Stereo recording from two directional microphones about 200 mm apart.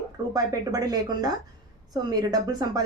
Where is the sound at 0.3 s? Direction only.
20° right (ahead or behind).